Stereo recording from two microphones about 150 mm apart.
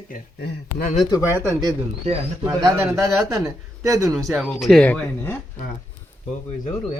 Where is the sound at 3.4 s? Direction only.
20° right (ahead or behind).